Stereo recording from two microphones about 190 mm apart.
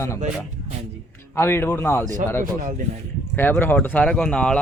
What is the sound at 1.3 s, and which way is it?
Speech, 10° left (ahead or behind).